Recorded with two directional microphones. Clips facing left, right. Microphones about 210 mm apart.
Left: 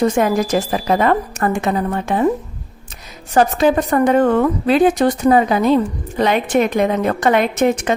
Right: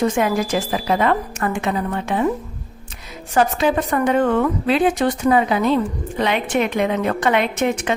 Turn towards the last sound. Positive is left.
turn(degrees=40)  # may be behind; listen again after turning